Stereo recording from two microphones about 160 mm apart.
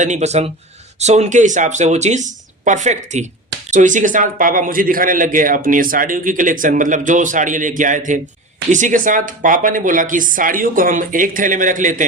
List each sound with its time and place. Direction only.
0.0 s a man's voice: 45° right (ahead or behind)